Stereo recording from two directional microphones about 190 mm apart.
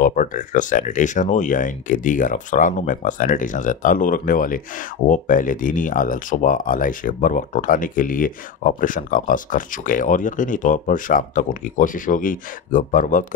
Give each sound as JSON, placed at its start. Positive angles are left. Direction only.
{"t": 0.0, "sound": "speech", "side_deg": 45}